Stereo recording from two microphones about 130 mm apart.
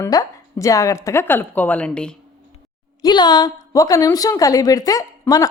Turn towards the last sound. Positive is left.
turn(degrees=25)  # may be behind; listen again after turning